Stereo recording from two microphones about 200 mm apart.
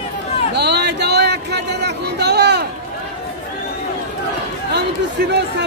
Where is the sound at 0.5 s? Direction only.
55° right (ahead or behind).